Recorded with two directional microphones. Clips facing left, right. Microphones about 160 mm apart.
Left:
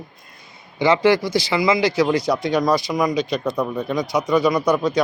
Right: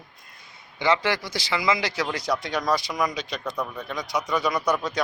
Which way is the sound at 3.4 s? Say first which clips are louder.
Left 8 dB; 25° left (ahead or behind).